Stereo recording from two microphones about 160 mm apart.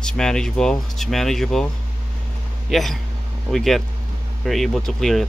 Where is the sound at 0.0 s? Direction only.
5° left (ahead or behind).